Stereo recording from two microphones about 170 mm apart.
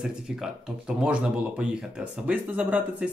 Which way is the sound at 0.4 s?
5° right (ahead or behind).